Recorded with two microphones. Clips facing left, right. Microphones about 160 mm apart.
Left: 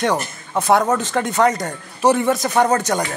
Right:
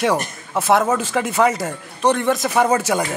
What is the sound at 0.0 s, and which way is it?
Speech, 5° right (ahead or behind).